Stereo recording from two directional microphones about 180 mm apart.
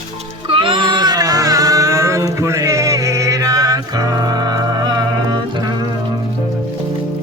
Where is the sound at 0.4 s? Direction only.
30° right (ahead or behind).